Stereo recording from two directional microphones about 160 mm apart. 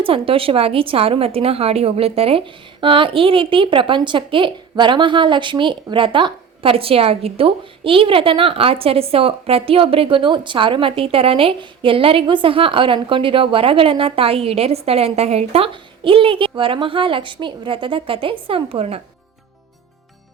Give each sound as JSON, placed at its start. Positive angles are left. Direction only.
{"t": 0.0, "sound": "a woman's voice", "side_deg": -35}